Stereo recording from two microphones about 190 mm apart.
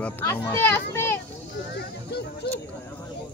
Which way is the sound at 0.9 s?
15° left (ahead or behind).